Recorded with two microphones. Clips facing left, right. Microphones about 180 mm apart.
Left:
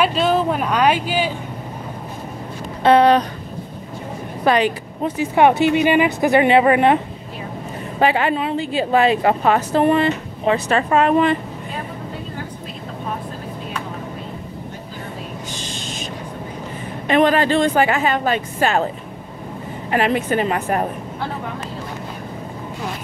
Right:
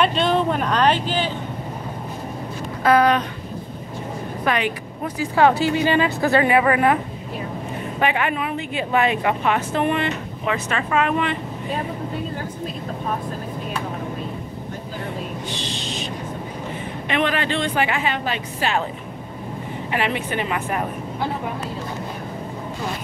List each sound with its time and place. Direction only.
0.0 s speech: 5° left (ahead or behind)
2.8 s speech: 30° left (ahead or behind)
4.5 s speech: 30° left (ahead or behind)
8.0 s speech: 30° left (ahead or behind)
15.5 s owl: 45° left (ahead or behind)
17.1 s a woman's voice: 40° left (ahead or behind)
19.9 s speech: 40° left (ahead or behind)